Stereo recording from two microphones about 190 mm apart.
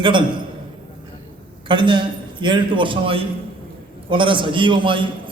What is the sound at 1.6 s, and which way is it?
A man's voice, 25° right (ahead or behind).